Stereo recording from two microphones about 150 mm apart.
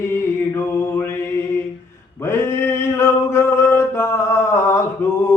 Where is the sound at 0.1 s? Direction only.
15° left (ahead or behind).